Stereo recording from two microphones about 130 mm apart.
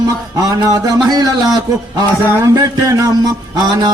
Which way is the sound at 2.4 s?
25° right (ahead or behind).